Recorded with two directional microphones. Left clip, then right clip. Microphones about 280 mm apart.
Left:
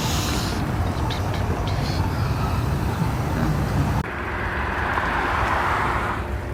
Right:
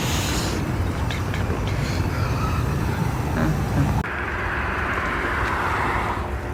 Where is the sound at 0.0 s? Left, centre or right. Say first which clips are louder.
Even; centre.